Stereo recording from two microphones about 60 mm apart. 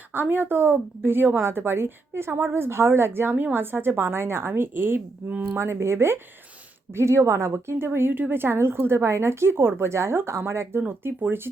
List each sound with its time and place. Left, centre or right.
0.1 s a woman's voice: right